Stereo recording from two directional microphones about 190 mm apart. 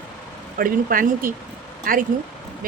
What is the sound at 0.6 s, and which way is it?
Speech, 50° right (ahead or behind).